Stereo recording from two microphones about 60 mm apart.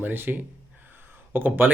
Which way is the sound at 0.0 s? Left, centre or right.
Right.